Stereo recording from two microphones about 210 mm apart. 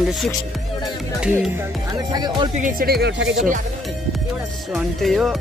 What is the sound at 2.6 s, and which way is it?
Speech, 45° right (ahead or behind).